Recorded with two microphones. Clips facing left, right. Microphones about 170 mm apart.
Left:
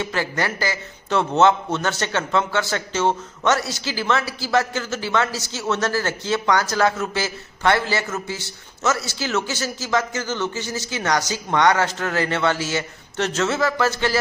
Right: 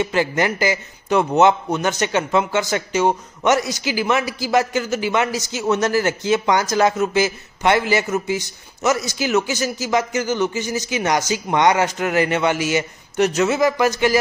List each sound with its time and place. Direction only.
0.0 s a man's voice: 15° right (ahead or behind)